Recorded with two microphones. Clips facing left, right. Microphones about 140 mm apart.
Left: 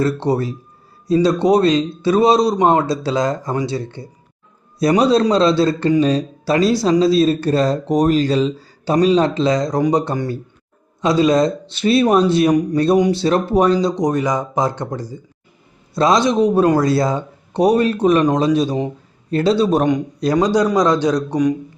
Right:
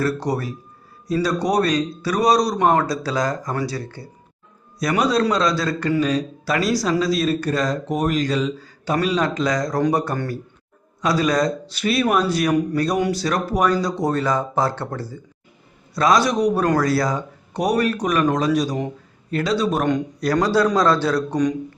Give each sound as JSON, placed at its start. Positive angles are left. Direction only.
{"t": 0.0, "sound": "speech", "side_deg": 25}
{"t": 13.7, "sound": "speech", "side_deg": 20}
{"t": 19.8, "sound": "speech", "side_deg": 20}